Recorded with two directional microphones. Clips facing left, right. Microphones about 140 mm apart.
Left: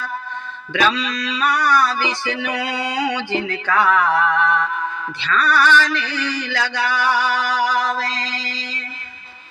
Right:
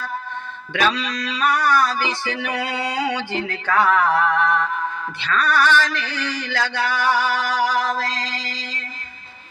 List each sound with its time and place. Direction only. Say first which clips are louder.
0.7 s music: left 2 dB; 45° right (ahead or behind)
3.3 s speech: left 3 dB; 10° left (ahead or behind)
3.7 s music: even; 40° right (ahead or behind)
5.2 s male singing: left 1 dB; 45° right (ahead or behind)